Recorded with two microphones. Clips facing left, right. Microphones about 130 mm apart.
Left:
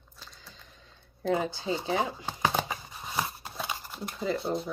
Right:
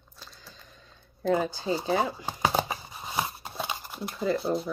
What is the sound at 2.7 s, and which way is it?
Scissors, 20° right (ahead or behind).